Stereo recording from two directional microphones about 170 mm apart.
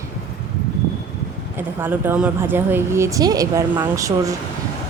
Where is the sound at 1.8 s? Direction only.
10° right (ahead or behind).